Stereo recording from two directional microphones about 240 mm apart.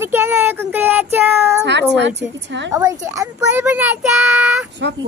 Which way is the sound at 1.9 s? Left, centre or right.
Right.